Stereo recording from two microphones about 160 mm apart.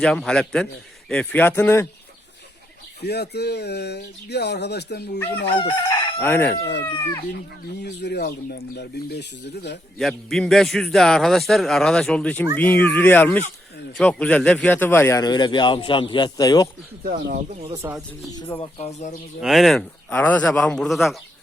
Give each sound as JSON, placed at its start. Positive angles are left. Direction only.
{"t": 0.0, "sound": "a man's voice", "side_deg": 5}
{"t": 3.0, "sound": "speech", "side_deg": 90}
{"t": 5.5, "sound": "chicken", "side_deg": 25}
{"t": 7.8, "sound": "speech", "side_deg": 90}
{"t": 10.0, "sound": "a man's voice", "side_deg": 0}
{"t": 15.2, "sound": "a man's voice", "side_deg": 25}
{"t": 17.0, "sound": "speech", "side_deg": -65}
{"t": 17.8, "sound": "speech", "side_deg": -20}
{"t": 18.3, "sound": "a man's voice", "side_deg": 20}
{"t": 18.6, "sound": "speech", "side_deg": 40}
{"t": 19.4, "sound": "a man's voice", "side_deg": 0}